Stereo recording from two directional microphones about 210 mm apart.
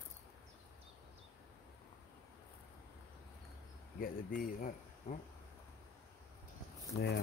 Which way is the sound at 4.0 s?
40° left (ahead or behind).